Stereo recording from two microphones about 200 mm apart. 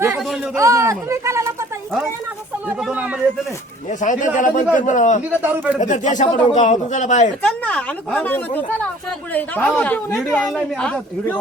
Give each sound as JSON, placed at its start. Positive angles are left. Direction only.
{"t": 0.2, "sound": "a sound", "side_deg": 0}
{"t": 0.5, "sound": "speech", "side_deg": -15}
{"t": 2.6, "sound": "speech", "side_deg": -5}
{"t": 3.8, "sound": "speech", "side_deg": 40}
{"t": 5.3, "sound": "speech", "side_deg": -10}
{"t": 5.8, "sound": "speech", "side_deg": 40}
{"t": 7.4, "sound": "a man's voice", "side_deg": 5}